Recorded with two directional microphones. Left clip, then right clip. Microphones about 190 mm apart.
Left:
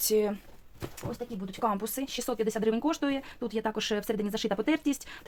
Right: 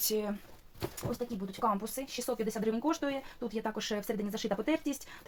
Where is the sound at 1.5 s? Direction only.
55° left (ahead or behind).